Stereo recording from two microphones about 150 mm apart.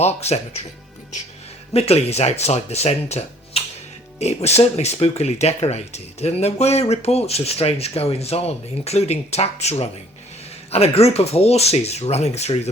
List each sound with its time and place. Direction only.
0.0 s speech: 45° left (ahead or behind)
1.7 s speech: 40° left (ahead or behind)